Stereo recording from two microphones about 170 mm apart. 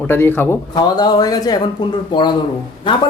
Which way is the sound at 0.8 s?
25° left (ahead or behind).